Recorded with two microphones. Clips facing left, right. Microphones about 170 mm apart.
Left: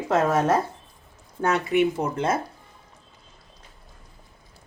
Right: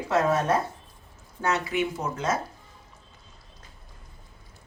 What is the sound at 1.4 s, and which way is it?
Speech, 60° left (ahead or behind).